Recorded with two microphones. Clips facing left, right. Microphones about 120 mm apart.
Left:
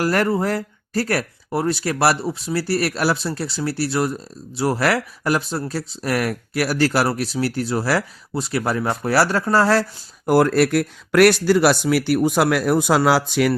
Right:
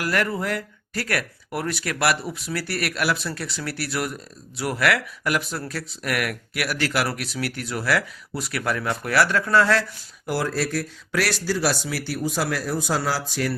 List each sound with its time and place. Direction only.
0.0 s speech: 35° left (ahead or behind)
10.2 s speech: 55° left (ahead or behind)